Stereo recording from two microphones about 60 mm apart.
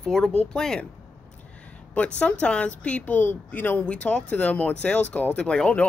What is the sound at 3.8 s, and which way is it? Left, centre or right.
Speech, centre.